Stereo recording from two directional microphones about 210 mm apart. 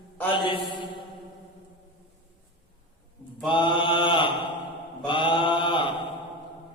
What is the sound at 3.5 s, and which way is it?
Mantra, 25° left (ahead or behind).